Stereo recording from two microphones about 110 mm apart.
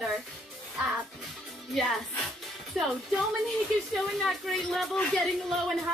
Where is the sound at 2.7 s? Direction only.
Centre (ahead or behind).